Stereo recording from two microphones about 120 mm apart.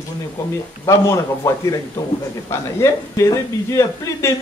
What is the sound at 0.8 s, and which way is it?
A woman's voice, 25° left (ahead or behind).